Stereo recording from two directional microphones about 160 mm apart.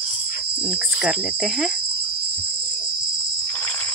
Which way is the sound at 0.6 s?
Centre (ahead or behind).